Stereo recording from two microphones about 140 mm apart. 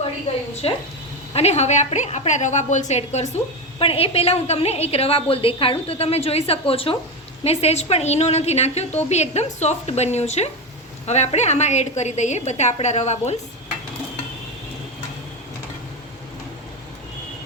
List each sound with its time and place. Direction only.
0.5 s a woman's voice: 45° left (ahead or behind)